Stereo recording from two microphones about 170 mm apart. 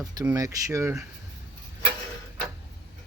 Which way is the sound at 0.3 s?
20° right (ahead or behind).